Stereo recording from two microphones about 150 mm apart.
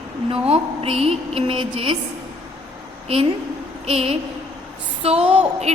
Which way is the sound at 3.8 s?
40° right (ahead or behind).